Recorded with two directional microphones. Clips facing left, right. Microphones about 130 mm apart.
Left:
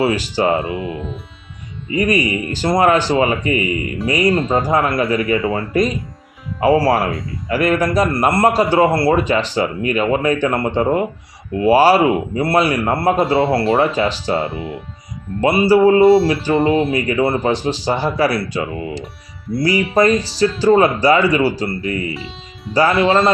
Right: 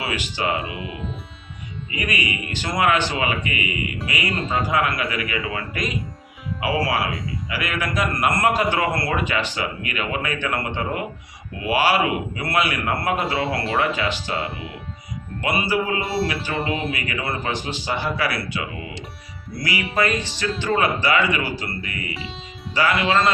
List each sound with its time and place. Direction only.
0.0 s a man's voice: 35° left (ahead or behind)
0.9 s speech: centre (ahead or behind)
1.9 s a man's voice: 35° left (ahead or behind)
7.1 s speech: centre (ahead or behind)
7.5 s a man's voice: 45° left (ahead or behind)
14.4 s speech: centre (ahead or behind)
15.4 s a man's voice: 35° left (ahead or behind)
22.1 s music: centre (ahead or behind)
22.7 s a man's voice: 35° left (ahead or behind)